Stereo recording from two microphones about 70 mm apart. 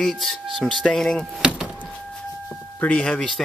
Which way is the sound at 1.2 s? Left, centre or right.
Centre.